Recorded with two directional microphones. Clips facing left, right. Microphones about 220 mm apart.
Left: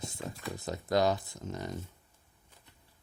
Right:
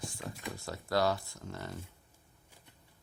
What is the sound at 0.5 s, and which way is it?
Speech, 20° left (ahead or behind).